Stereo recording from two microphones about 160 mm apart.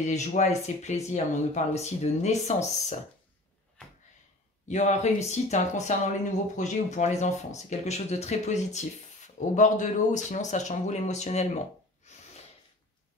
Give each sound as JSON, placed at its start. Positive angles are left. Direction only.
{"t": 0.0, "sound": "speech", "side_deg": 45}
{"t": 4.6, "sound": "speech", "side_deg": 45}